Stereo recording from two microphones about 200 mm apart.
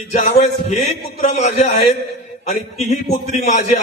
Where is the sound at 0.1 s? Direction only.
35° left (ahead or behind).